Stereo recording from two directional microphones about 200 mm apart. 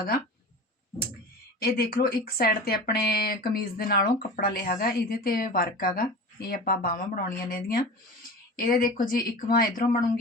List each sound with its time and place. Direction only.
1.5 s speech: 50° left (ahead or behind)